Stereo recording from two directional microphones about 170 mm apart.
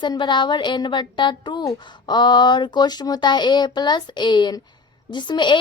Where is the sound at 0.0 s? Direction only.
25° left (ahead or behind).